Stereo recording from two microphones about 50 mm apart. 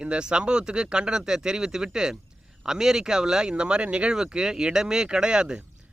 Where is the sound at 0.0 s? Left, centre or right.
Centre.